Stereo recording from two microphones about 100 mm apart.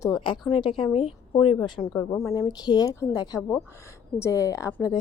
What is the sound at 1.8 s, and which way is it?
Speech, 25° left (ahead or behind).